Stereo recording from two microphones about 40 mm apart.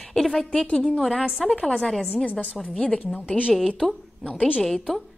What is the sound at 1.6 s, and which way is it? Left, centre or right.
A woman's voice, centre.